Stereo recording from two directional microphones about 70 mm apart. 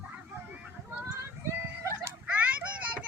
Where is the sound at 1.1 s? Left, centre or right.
Right.